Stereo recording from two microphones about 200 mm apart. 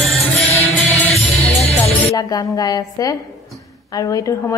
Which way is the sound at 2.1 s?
20° left (ahead or behind).